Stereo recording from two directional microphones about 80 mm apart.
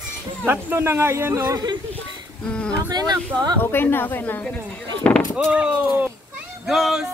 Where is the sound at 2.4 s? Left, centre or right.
Centre.